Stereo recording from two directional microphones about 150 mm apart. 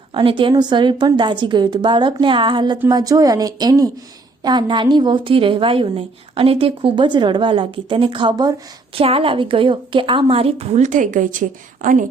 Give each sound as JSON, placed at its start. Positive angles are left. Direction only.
{"t": 0.1, "sound": "a woman's voice", "side_deg": -35}